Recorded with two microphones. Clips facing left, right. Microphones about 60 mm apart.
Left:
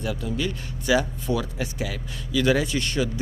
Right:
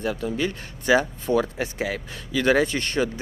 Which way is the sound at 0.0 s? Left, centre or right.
Right.